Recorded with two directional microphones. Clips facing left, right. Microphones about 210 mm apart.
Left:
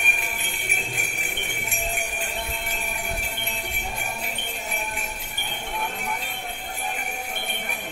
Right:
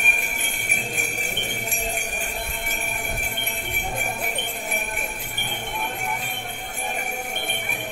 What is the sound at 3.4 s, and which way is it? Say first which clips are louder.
Jingle bell: right 2 dB; 55° right (ahead or behind).